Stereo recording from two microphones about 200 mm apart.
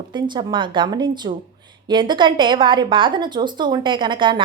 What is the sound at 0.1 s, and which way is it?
Speech, 20° right (ahead or behind).